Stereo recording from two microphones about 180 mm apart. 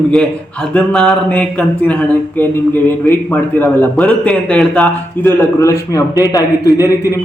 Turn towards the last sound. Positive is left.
turn(degrees=20)  # may be behind; listen again after turning